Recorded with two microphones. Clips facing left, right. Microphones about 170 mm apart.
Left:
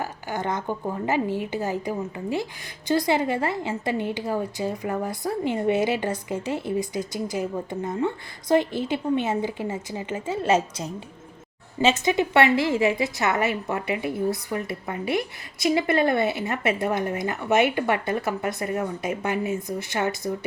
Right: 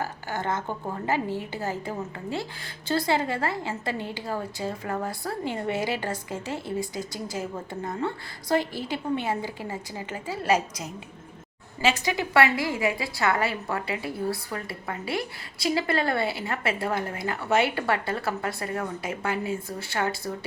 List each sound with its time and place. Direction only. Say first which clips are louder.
0.0 s a woman's voice: left 2 dB; 15° left (ahead or behind)